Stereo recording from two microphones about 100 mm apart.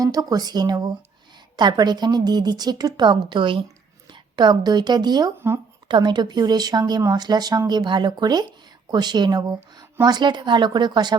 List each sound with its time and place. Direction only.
0.0 s a woman's voice: 40° right (ahead or behind)